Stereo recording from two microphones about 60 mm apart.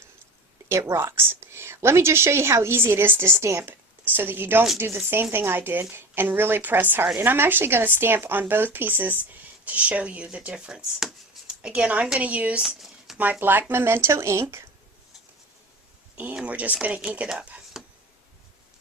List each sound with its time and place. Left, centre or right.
0.7 s a woman's voice: right
0.9 s a woman's voice: right
12.6 s a sound: centre
13.4 s a woman's voice: right
16.4 s speech: right
17.7 s a sound: centre